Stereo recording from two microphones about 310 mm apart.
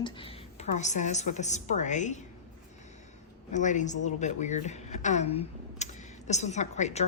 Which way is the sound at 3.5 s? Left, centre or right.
Left.